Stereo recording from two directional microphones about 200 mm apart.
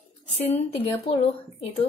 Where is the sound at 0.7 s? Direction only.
25° left (ahead or behind).